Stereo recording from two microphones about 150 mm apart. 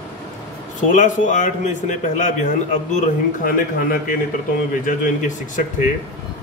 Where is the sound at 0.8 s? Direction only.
55° left (ahead or behind).